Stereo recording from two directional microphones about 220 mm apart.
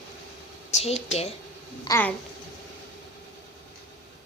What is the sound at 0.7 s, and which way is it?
Speech, 30° left (ahead or behind).